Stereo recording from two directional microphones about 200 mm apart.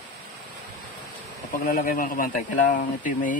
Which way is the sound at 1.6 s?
45° left (ahead or behind).